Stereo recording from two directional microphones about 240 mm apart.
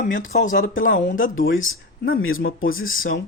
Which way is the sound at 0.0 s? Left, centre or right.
Left.